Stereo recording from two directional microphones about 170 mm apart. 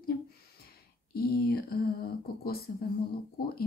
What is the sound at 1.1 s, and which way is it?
Speech, 65° left (ahead or behind).